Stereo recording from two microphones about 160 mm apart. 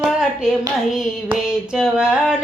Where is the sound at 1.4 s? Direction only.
5° right (ahead or behind).